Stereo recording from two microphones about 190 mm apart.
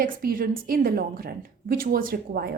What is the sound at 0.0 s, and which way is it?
A woman's voice, 50° right (ahead or behind).